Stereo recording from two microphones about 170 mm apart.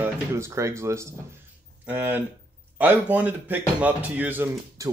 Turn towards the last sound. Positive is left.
turn(degrees=-15)  # may be behind; listen again after turning